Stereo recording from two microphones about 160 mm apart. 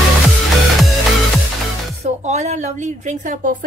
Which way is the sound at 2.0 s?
45° right (ahead or behind).